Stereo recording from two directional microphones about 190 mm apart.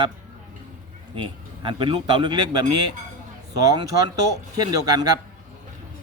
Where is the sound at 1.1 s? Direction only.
25° right (ahead or behind).